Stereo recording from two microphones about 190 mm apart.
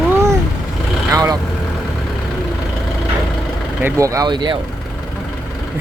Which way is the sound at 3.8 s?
15° right (ahead or behind).